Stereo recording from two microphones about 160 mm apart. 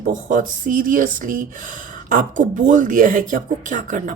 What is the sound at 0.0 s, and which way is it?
Speech, 55° right (ahead or behind).